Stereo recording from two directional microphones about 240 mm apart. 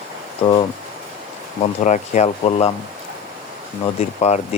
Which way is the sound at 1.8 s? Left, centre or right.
Left.